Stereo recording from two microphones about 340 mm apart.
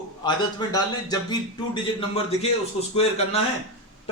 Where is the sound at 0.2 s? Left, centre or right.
Centre.